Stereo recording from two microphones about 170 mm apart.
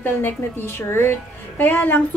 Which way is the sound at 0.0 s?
10° left (ahead or behind).